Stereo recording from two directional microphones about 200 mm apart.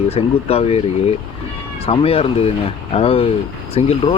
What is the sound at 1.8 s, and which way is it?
Speech, 30° left (ahead or behind).